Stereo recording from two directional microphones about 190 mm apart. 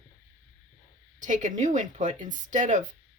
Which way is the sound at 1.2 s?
40° right (ahead or behind).